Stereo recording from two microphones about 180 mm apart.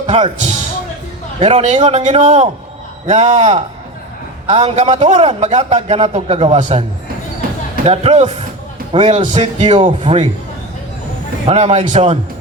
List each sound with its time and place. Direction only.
0.1 s a man's voice: 35° right (ahead or behind)
7.9 s a man's voice: 40° right (ahead or behind)
11.4 s a man's voice: 35° right (ahead or behind)